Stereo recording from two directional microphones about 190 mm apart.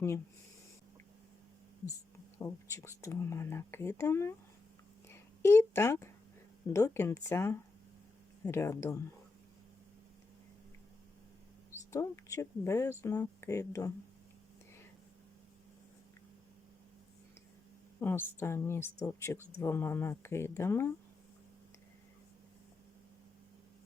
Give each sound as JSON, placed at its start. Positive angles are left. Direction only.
{"t": 2.4, "sound": "speech", "side_deg": 15}
{"t": 5.0, "sound": "a sound", "side_deg": 15}
{"t": 6.7, "sound": "speech", "side_deg": 15}
{"t": 11.9, "sound": "speech", "side_deg": 15}
{"t": 18.0, "sound": "speech", "side_deg": 10}